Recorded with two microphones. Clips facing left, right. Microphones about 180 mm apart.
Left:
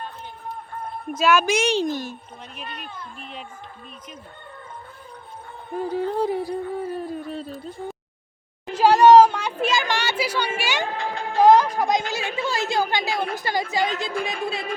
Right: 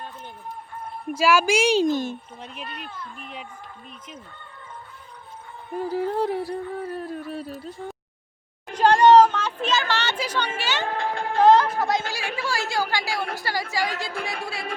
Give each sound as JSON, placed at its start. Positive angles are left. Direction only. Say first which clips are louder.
{"t": 1.1, "sound": "speech", "louder": "even", "side_deg": -10}
{"t": 3.2, "sound": "speech", "louder": "left 1 dB", "side_deg": -10}
{"t": 5.9, "sound": "a sound", "louder": "left 1 dB", "side_deg": -5}
{"t": 8.8, "sound": "a sound", "louder": "left 2 dB", "side_deg": 10}
{"t": 10.8, "sound": "music", "louder": "right 1 dB", "side_deg": -55}
{"t": 11.3, "sound": "speech", "louder": "left 2 dB", "side_deg": 10}